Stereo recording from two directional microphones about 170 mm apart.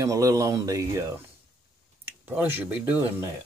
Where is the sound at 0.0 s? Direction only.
20° right (ahead or behind).